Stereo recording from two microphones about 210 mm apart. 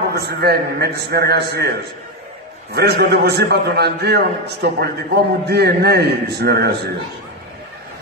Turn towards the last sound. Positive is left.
turn(degrees=-50)  # may be behind; listen again after turning